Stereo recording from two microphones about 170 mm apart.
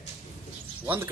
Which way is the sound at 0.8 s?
15° right (ahead or behind).